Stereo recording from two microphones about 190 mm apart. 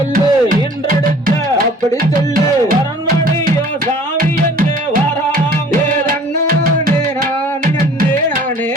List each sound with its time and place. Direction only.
0.1 s music: 45° right (ahead or behind)
6.1 s music: 50° right (ahead or behind)